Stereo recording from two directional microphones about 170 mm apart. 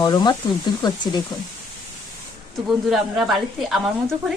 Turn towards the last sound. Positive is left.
turn(degrees=0)  # may be behind; listen again after turning